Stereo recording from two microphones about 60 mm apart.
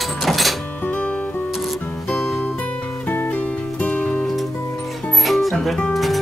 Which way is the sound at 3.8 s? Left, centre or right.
Centre.